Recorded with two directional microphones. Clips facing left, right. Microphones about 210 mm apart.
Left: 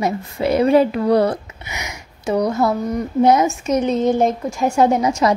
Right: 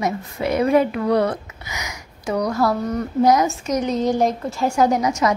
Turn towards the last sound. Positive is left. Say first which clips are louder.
# left 2 dB
turn(degrees=30)  # may be behind; listen again after turning